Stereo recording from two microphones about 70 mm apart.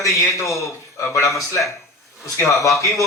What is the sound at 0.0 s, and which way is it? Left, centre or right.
Speech, left.